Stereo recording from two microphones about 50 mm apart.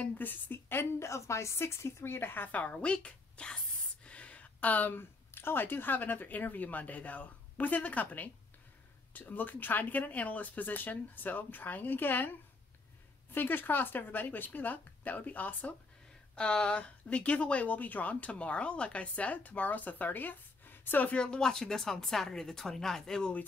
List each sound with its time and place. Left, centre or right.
0.2 s a woman's voice: left
0.9 s speech: left
2.7 s a sound: left
5.3 s speech: left
16.3 s a woman's voice: left
21.1 s a woman's voice: centre